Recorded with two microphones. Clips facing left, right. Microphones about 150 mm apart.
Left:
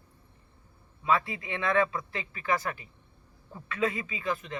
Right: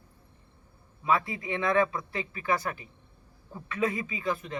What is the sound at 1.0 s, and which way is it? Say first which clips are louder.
Speech: even; 15° right (ahead or behind).